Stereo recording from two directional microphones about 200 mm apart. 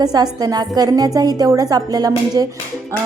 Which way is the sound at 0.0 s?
20° right (ahead or behind).